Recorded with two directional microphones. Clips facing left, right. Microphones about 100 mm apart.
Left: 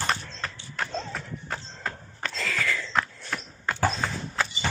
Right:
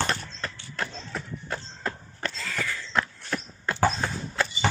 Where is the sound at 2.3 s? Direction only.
90° left.